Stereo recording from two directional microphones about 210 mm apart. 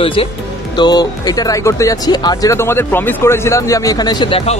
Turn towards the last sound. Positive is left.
turn(degrees=25)  # may be behind; listen again after turning